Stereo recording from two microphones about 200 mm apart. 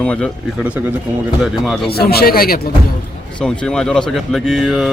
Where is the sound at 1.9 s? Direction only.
50° left (ahead or behind).